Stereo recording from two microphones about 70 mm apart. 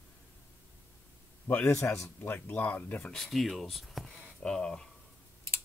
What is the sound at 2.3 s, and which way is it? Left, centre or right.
Speech, left.